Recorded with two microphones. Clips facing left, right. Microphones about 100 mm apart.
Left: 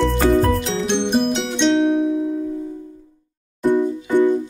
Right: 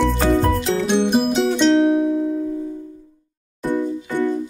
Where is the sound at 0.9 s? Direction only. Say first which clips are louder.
Right 1 dB; 5° right (ahead or behind).